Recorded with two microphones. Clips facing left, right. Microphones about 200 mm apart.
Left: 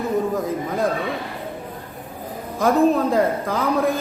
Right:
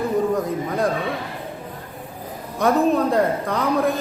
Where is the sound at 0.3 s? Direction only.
Centre (ahead or behind).